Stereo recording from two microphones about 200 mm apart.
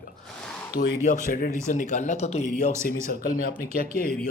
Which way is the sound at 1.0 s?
40° left (ahead or behind).